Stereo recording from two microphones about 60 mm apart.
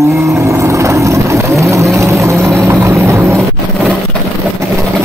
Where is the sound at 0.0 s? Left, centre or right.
Right.